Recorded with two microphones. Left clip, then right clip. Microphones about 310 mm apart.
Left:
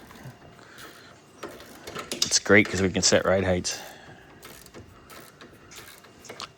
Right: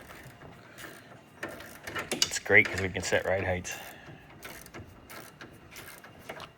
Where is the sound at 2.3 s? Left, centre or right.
Left.